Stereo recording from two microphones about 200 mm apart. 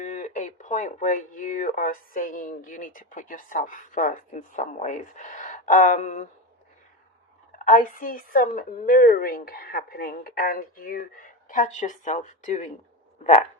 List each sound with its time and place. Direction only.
0.0 s speech: 35° left (ahead or behind)
7.6 s a woman's voice: 40° left (ahead or behind)